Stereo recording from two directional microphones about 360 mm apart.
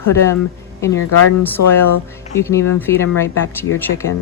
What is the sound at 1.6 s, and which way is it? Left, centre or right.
Speech, left.